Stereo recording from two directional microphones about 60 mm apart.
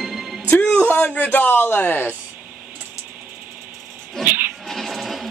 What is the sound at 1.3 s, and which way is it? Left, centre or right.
Speech, left.